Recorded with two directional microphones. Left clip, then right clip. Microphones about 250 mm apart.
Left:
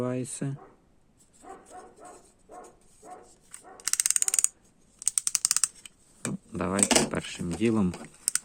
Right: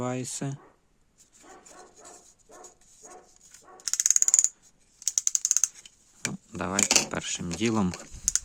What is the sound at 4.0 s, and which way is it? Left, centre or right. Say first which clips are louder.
Mechanisms: right 5 dB; left.